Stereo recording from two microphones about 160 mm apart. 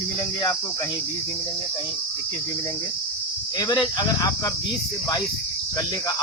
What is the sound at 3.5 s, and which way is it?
Speech, 25° left (ahead or behind).